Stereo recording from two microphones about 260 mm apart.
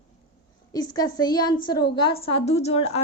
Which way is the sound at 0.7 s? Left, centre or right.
Centre.